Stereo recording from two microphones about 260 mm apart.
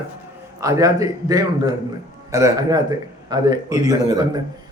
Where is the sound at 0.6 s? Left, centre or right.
Centre.